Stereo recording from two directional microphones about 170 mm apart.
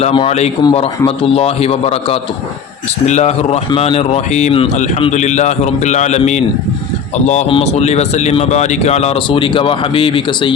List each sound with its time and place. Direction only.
0.0 s speech: 35° left (ahead or behind)
7.5 s speech: 40° left (ahead or behind)